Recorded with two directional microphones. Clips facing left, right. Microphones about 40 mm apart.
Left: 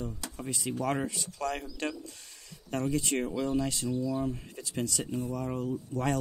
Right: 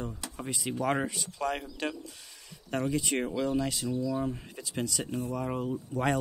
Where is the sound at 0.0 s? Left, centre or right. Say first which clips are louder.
Even; centre.